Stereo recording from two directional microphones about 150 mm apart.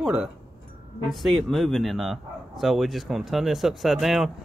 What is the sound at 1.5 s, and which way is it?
Speech, centre (ahead or behind).